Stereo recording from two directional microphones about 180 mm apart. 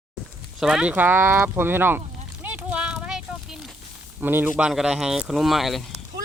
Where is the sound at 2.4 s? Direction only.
10° right (ahead or behind).